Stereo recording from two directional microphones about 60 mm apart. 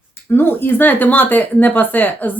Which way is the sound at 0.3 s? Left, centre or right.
Left.